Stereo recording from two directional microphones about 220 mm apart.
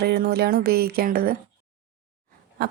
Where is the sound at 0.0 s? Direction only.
45° right (ahead or behind).